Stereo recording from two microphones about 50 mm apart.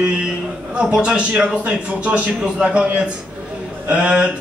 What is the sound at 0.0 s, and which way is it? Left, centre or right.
A man's voice, centre.